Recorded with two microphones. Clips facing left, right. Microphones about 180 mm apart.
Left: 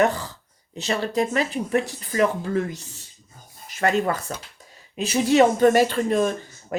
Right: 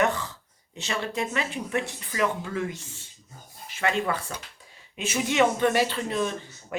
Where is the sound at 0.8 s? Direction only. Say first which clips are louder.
Left 6 dB; 35° left (ahead or behind).